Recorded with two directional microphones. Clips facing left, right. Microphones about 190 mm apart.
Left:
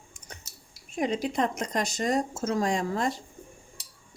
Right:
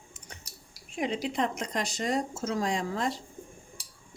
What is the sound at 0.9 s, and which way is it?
Speech, 45° left (ahead or behind).